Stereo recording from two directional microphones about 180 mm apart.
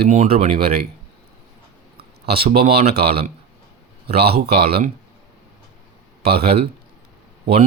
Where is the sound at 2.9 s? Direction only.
60° right (ahead or behind).